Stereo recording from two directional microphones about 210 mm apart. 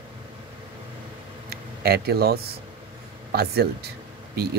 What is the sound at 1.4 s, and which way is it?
Speech, 50° right (ahead or behind).